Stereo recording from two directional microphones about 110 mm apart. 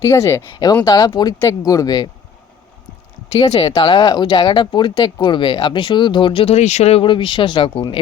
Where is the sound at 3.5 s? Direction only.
65° left (ahead or behind).